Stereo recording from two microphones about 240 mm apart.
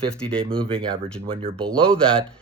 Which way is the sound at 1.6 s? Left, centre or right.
Centre.